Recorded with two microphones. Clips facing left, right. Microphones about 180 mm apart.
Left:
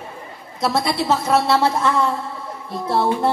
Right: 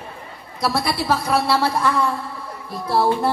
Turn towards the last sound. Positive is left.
turn(degrees=25)  # may be behind; listen again after turning